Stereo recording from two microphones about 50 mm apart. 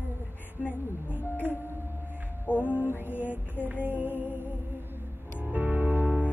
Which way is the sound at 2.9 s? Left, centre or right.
Left.